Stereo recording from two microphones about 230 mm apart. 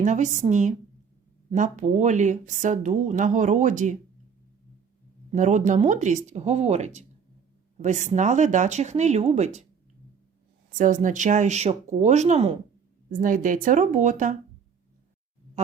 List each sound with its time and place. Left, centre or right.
0.0 s a woman's voice: right
5.3 s a woman's voice: right
10.8 s a woman's voice: right